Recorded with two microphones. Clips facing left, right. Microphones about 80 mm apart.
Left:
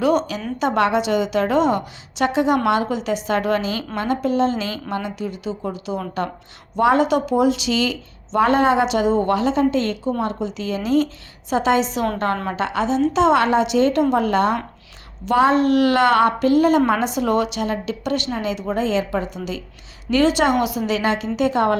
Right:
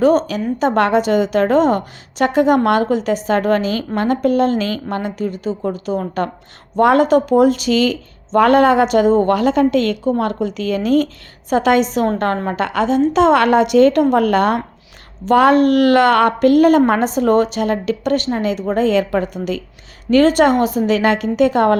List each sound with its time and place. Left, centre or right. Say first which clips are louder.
0.0 s a woman's voice: right 5 dB; right